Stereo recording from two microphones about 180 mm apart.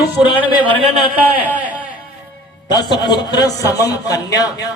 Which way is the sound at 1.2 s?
10° right (ahead or behind).